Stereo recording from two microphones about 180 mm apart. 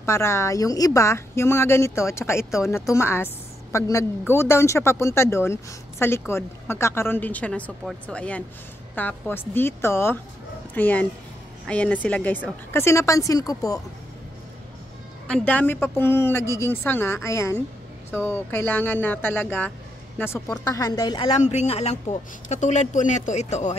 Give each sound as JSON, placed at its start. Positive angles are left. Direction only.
{"t": 0.0, "sound": "speech", "side_deg": 15}
{"t": 15.2, "sound": "speech", "side_deg": 5}
{"t": 21.3, "sound": "speech", "side_deg": 40}